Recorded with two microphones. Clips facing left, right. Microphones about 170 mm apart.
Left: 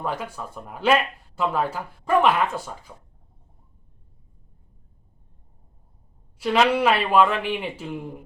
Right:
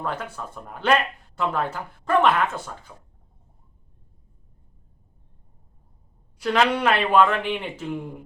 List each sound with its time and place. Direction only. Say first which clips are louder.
0.0 s speech: left 1 dB; 10° left (ahead or behind)
6.4 s speech: left 2 dB; 5° left (ahead or behind)